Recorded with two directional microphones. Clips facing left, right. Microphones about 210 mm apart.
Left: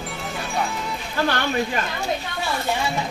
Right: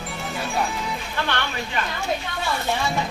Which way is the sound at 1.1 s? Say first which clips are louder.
Left 5 dB; 40° left (ahead or behind).